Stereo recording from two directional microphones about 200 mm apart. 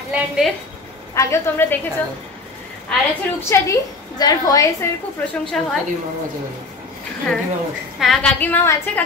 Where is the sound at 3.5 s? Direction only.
20° left (ahead or behind).